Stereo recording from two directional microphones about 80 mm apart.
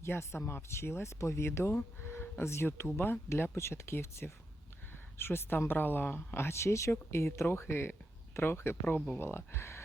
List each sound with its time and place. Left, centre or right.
0.0 s speech: left